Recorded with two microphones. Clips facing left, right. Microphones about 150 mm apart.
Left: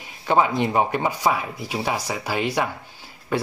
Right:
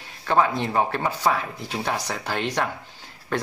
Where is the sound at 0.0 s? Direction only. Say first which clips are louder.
Left 1 dB; 15° left (ahead or behind).